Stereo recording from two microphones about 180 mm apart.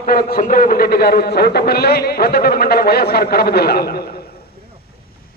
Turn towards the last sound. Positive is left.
turn(degrees=60)  # may be behind; listen again after turning